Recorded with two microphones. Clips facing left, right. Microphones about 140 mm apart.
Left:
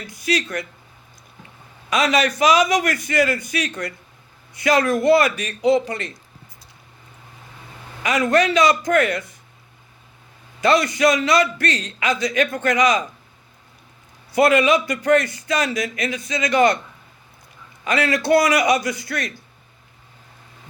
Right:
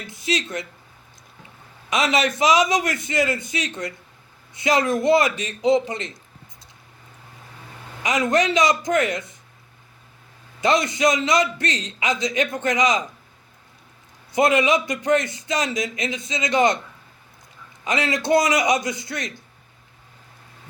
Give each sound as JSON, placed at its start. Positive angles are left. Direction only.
{"t": 0.1, "sound": "a man's voice", "side_deg": -25}
{"t": 1.9, "sound": "a man's voice", "side_deg": -25}
{"t": 8.0, "sound": "a man's voice", "side_deg": -20}
{"t": 10.6, "sound": "a man's voice", "side_deg": -20}
{"t": 14.3, "sound": "a man's voice", "side_deg": -20}
{"t": 17.8, "sound": "a man's voice", "side_deg": -20}